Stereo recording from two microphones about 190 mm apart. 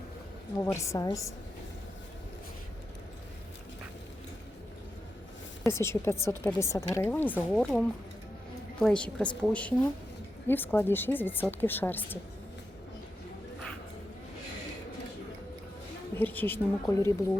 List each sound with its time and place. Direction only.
0.6 s speech: 15° left (ahead or behind)
5.6 s a woman's voice: 15° left (ahead or behind)
16.1 s speech: 10° left (ahead or behind)